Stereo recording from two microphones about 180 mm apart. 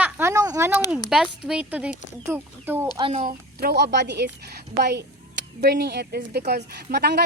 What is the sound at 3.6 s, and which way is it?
Speech, 65° right (ahead or behind).